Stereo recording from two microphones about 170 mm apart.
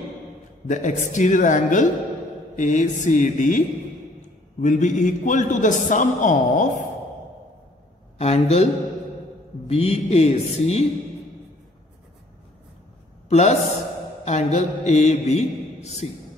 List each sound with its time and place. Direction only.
0.7 s a man's voice: 45° left (ahead or behind)
8.2 s speech: 40° left (ahead or behind)
9.7 s speech: 40° left (ahead or behind)
13.3 s a man's voice: 40° left (ahead or behind)